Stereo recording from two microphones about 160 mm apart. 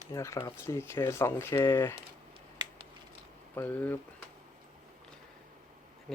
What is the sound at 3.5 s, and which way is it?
Speech, 15° left (ahead or behind).